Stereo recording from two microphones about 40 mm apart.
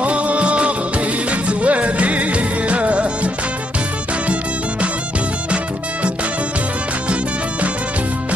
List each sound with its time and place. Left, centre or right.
0.0 s music: right